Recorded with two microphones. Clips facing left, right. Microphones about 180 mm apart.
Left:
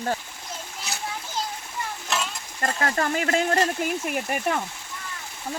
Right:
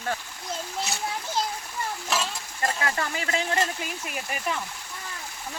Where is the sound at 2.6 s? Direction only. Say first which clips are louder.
Left 3 dB; 45° left (ahead or behind).